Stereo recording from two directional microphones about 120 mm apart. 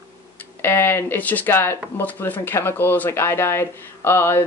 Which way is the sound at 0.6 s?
20° left (ahead or behind).